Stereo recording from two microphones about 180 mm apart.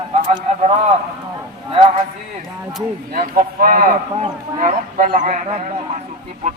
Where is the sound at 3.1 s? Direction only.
45° right (ahead or behind).